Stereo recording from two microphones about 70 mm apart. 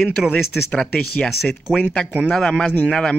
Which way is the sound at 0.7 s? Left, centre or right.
Centre.